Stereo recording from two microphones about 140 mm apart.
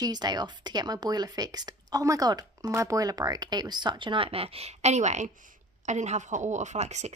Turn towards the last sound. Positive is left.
turn(degrees=-55)  # may be behind; listen again after turning